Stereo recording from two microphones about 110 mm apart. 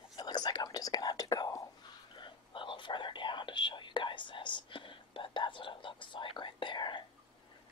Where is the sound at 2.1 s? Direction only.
50° left (ahead or behind).